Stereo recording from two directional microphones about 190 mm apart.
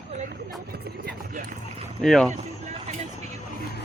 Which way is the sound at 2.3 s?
35° right (ahead or behind).